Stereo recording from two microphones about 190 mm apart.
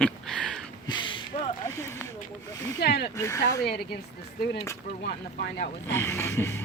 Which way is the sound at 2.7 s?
60° left (ahead or behind).